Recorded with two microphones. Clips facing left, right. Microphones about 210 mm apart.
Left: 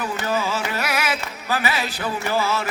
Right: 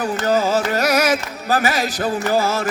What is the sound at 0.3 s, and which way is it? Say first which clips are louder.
Music: right 8 dB; 40° right (ahead or behind).